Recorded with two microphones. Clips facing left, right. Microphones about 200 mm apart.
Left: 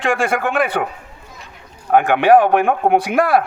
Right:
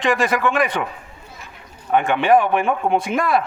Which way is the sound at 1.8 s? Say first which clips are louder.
Left 4 dB; 55° left (ahead or behind).